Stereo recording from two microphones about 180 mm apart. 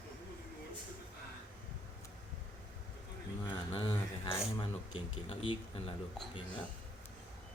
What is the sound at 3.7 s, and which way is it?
Speech, 30° left (ahead or behind).